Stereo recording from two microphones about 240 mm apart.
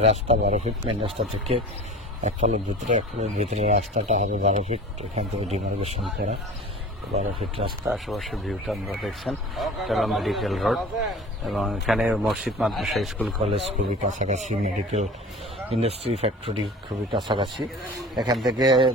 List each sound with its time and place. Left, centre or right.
0.0 s speech: right
7.5 s speech: centre
7.9 s speech: centre
13.5 s speech: right